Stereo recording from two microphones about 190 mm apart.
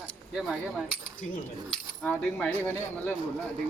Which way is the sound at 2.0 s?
5° left (ahead or behind).